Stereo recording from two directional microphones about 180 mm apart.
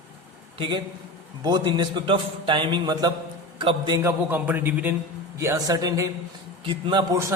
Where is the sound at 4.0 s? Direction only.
10° right (ahead or behind).